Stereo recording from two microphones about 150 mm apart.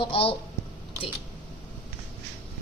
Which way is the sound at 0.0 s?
35° left (ahead or behind).